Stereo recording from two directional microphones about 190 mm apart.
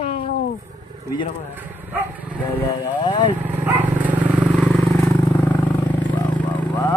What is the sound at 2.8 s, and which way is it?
Speech, 25° left (ahead or behind).